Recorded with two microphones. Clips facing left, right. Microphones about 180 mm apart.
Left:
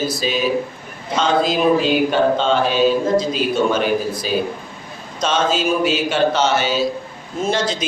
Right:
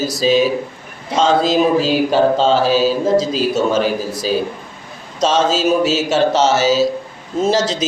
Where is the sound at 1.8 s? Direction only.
35° right (ahead or behind).